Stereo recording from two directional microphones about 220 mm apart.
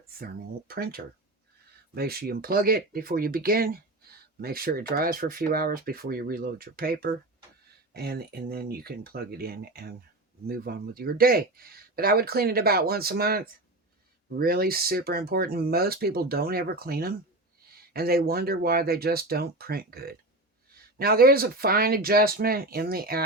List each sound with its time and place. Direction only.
0.7 s speech: 45° right (ahead or behind)